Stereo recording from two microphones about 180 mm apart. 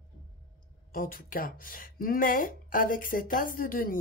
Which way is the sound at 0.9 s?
50° left (ahead or behind).